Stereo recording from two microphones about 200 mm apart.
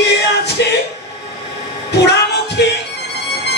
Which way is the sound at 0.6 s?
60° left (ahead or behind).